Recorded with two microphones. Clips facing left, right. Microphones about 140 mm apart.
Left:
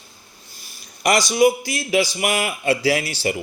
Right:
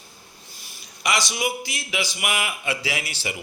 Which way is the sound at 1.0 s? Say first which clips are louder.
Left 9 dB; 45° left (ahead or behind).